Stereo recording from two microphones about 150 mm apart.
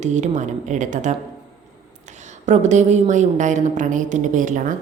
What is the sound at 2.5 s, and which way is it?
A woman's voice, 50° right (ahead or behind).